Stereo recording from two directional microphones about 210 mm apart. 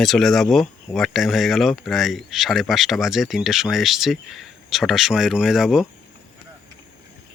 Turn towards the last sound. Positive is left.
turn(degrees=0)  # may be behind; listen again after turning